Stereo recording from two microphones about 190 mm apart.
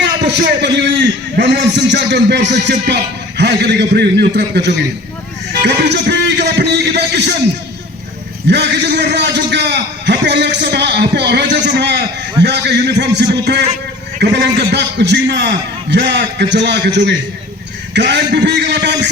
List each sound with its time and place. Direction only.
0.0 s a man's voice: 65° right (ahead or behind)
5.5 s a sound: 65° right (ahead or behind)
8.4 s a man's voice: 65° right (ahead or behind)